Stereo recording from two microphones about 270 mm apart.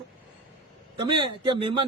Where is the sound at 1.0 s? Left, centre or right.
Centre.